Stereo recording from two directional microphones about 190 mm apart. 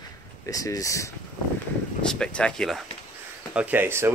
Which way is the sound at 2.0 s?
5° left (ahead or behind).